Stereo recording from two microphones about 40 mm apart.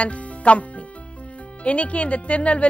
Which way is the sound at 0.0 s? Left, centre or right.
Left.